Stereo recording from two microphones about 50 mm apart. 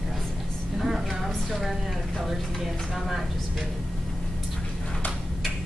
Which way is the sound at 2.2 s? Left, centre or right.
Centre.